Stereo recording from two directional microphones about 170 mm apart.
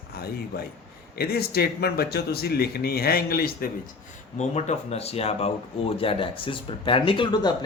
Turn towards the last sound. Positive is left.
turn(degrees=25)  # may be behind; listen again after turning